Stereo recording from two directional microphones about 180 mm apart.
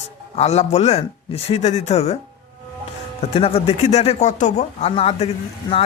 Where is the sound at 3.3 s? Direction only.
35° left (ahead or behind).